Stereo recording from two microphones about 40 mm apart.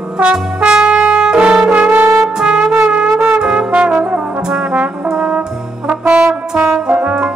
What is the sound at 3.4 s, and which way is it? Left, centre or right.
Brass instrument, right.